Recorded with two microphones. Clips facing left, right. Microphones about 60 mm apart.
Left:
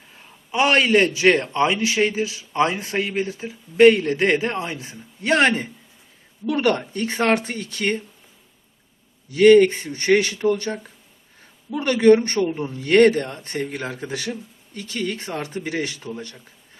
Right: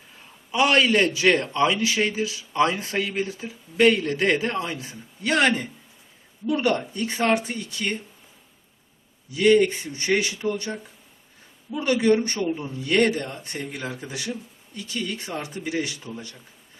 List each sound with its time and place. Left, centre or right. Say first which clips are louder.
0.5 s a man's voice: left 2 dB; left
6.4 s speech: left 2 dB; left
9.3 s speech: left 6 dB; left
11.7 s speech: left 5 dB; left
12.5 s a man's voice: left 1 dB; left
12.7 s speech: left 7 dB; left